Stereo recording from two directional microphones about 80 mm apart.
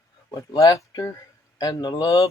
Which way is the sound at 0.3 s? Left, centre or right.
Left.